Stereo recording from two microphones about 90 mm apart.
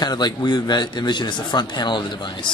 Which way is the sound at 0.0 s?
50° left (ahead or behind).